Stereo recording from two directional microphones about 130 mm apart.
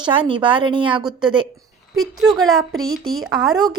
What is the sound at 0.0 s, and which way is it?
A woman's voice, 40° right (ahead or behind).